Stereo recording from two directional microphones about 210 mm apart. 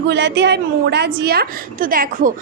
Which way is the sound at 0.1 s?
55° right (ahead or behind).